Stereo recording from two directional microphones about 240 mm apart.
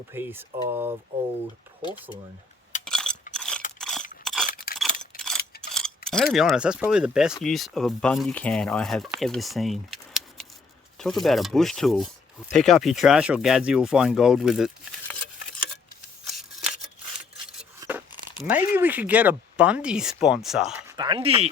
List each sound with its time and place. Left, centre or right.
0.1 s speech: centre
1.8 s speech: centre
2.8 s coin: centre
3.3 s mechanisms: centre
3.8 s crunch: centre
4.2 s a sound: centre
4.4 s a sound: left
4.8 s scissors: centre
6.1 s speech: centre
17.7 s a sound: centre
18.7 s speech: centre; by 21.5 s right